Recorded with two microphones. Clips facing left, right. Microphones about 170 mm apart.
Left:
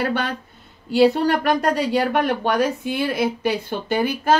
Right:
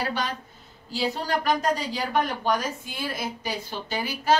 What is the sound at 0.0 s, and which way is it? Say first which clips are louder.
A woman's voice: left 6 dB; 60° left (ahead or behind).